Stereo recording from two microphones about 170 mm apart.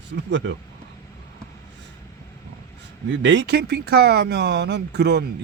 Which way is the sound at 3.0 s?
90° right.